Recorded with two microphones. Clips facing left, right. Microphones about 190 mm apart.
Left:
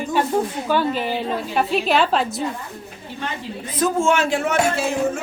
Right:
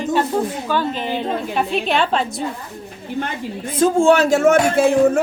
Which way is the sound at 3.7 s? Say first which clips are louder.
Right 5 dB; 30° right (ahead or behind).